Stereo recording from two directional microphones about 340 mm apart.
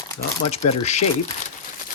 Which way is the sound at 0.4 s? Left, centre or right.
Centre.